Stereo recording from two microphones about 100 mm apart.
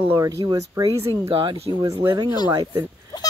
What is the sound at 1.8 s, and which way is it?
Speech, 30° right (ahead or behind).